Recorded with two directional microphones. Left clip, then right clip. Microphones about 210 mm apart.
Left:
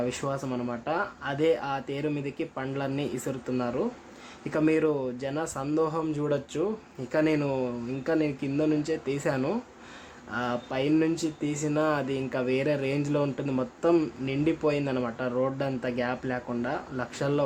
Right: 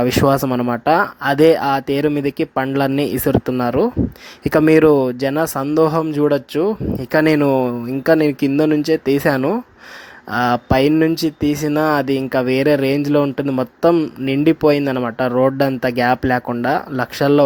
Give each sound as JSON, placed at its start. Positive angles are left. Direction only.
{"t": 0.0, "sound": "speech", "side_deg": -45}